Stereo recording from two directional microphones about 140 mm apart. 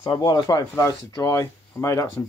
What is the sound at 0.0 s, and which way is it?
Speech, 30° left (ahead or behind).